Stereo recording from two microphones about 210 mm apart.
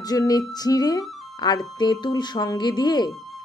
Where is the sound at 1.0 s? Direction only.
Centre (ahead or behind).